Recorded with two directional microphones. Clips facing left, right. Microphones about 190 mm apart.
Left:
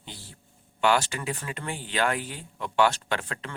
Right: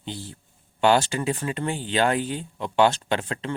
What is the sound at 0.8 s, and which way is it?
Speech, 25° right (ahead or behind).